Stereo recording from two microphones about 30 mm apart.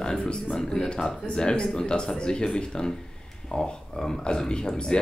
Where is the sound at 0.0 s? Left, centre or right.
Left.